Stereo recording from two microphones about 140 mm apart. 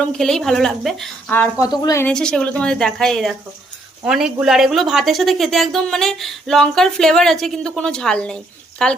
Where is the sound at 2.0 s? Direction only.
5° left (ahead or behind).